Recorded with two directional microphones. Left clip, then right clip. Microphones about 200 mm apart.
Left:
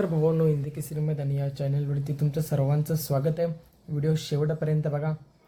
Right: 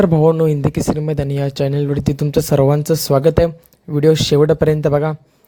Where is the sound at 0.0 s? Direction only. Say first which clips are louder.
Right 12 dB; 45° right (ahead or behind).